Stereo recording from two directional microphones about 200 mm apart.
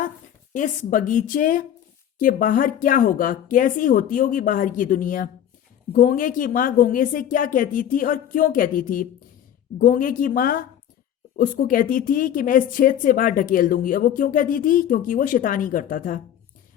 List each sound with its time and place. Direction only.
0.5 s a woman's voice: 40° left (ahead or behind)